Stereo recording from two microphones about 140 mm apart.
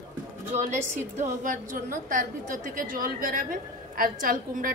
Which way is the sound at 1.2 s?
70° right (ahead or behind).